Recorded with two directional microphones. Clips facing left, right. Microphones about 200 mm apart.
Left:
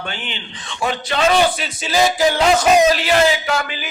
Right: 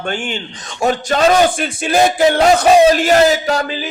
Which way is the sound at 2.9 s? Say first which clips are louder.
Right 4 dB; 45° right (ahead or behind).